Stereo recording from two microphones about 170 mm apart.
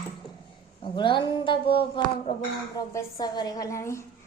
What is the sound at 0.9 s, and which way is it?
A child's voice, 30° left (ahead or behind).